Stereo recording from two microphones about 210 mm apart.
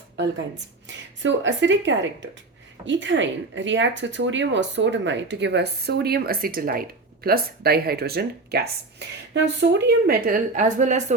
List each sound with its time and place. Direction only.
0.9 s a woman's voice: 60° right (ahead or behind); by 11.0 s 35° right (ahead or behind)